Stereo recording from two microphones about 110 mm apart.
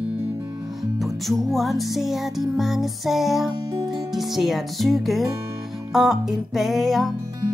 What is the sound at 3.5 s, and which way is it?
Music, 30° right (ahead or behind).